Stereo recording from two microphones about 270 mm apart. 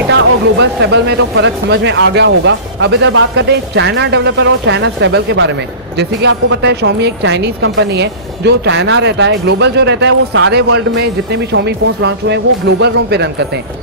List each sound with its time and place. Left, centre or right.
0.6 s speech: right